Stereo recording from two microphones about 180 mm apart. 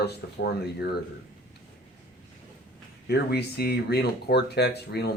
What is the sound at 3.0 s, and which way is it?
Speech, 65° left (ahead or behind).